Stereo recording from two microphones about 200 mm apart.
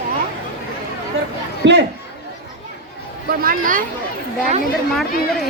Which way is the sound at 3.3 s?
45° right (ahead or behind).